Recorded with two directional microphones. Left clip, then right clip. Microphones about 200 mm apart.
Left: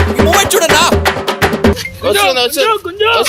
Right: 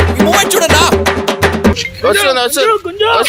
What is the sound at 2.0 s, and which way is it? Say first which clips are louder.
Speech: even; 10° right (ahead or behind).